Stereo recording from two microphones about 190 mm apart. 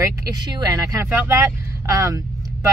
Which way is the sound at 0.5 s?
15° right (ahead or behind).